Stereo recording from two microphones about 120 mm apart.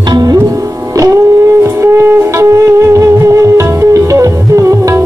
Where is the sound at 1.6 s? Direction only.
20° right (ahead or behind).